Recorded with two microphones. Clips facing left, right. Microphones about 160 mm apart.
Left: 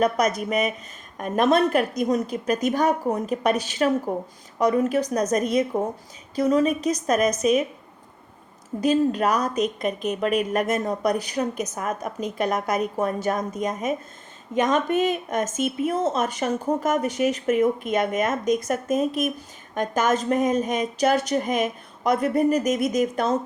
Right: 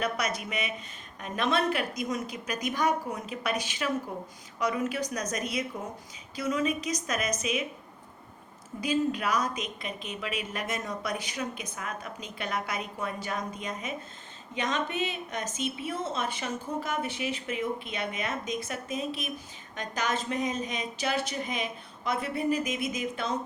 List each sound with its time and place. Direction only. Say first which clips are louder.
0.0 s a woman's voice: left 9 dB; 40° left (ahead or behind)
8.8 s a woman's voice: left 8 dB; 40° left (ahead or behind)